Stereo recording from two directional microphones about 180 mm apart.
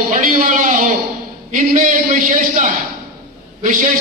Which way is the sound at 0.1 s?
45° right (ahead or behind).